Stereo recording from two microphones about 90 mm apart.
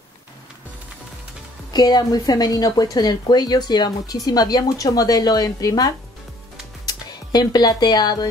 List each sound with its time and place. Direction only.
1.7 s speech: 50° left (ahead or behind)